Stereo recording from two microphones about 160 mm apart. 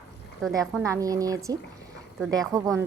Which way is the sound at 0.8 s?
20° right (ahead or behind).